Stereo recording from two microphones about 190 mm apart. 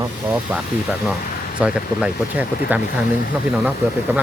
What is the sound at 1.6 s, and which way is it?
Speech, 5° right (ahead or behind).